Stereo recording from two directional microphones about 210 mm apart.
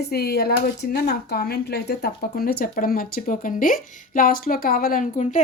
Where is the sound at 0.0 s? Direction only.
50° left (ahead or behind).